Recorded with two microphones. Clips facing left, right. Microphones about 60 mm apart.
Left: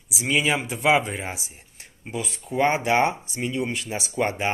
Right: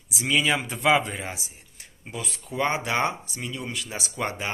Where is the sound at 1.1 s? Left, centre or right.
Left.